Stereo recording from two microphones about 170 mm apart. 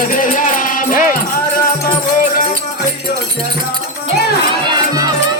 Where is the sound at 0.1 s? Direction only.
50° left (ahead or behind).